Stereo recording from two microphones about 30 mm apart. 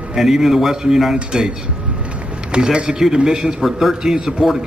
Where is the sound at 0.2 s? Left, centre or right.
Centre.